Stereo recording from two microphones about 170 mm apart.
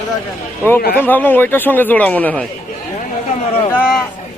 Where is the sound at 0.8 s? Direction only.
60° left (ahead or behind).